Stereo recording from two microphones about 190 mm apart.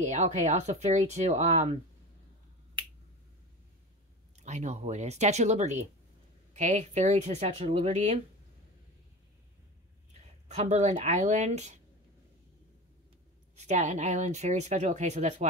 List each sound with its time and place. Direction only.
0.0 s speech: 35° right (ahead or behind)
4.4 s speech: 40° right (ahead or behind)
10.5 s speech: 35° right (ahead or behind)
13.6 s speech: 35° right (ahead or behind)